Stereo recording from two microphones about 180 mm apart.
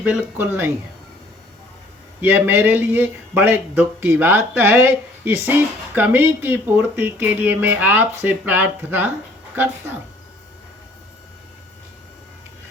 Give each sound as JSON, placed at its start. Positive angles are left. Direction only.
{"t": 0.0, "sound": "speech", "side_deg": -10}
{"t": 2.2, "sound": "speech", "side_deg": -10}